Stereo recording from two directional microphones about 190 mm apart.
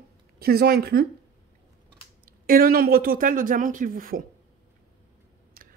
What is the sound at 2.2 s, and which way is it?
Speech, 50° right (ahead or behind).